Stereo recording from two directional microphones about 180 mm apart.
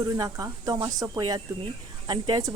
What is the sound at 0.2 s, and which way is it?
Speech, 20° right (ahead or behind).